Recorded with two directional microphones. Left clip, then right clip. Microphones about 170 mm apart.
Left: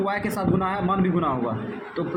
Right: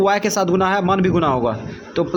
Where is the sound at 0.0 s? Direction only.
65° right (ahead or behind).